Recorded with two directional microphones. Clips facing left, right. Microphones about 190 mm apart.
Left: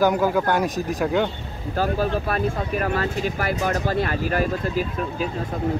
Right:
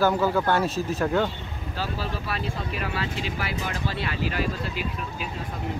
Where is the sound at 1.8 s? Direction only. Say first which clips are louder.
Left 9 dB; 50° left (ahead or behind).